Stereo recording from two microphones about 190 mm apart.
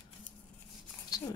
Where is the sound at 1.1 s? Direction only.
20° left (ahead or behind).